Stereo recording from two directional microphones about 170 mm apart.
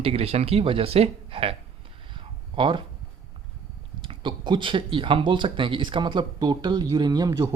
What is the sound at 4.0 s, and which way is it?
Speech, 30° right (ahead or behind).